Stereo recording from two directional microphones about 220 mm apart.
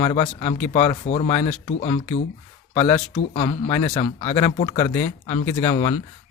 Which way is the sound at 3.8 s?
15° left (ahead or behind).